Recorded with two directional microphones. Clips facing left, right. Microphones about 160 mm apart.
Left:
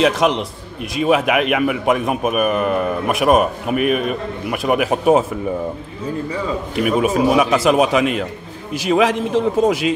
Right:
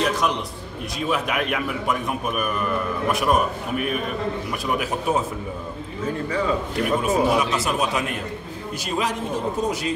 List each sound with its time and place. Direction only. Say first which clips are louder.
0.0 s a man's voice: left 7 dB; 90° left
0.9 s a man's voice: left 9 dB; 75° left (ahead or behind)
7.0 s a man's voice: left 6 dB; 85° left